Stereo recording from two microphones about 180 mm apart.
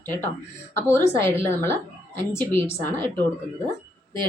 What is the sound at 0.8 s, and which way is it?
A woman's voice, 15° left (ahead or behind).